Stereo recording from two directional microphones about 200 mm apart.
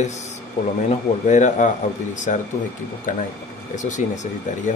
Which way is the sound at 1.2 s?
35° left (ahead or behind).